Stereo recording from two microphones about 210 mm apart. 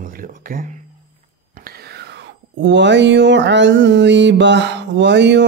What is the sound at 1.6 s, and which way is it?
Speech, 50° right (ahead or behind).